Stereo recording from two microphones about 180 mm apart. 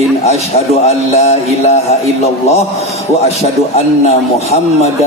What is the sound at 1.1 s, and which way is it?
Speech, 40° left (ahead or behind).